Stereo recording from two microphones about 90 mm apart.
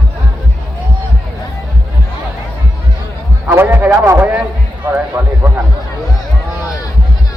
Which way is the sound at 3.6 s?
25° right (ahead or behind).